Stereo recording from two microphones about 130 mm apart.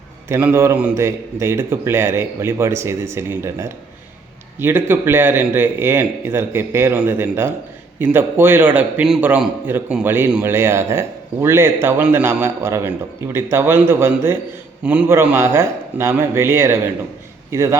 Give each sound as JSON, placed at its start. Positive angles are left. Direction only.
{"t": 0.3, "sound": "a man's voice", "side_deg": -15}